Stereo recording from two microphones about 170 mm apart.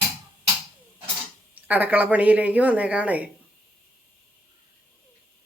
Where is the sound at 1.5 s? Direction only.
10° right (ahead or behind).